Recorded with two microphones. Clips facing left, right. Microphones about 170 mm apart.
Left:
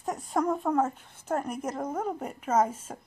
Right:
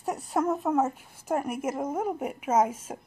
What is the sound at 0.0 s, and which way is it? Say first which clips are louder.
Speech: right 1 dB; 5° right (ahead or behind).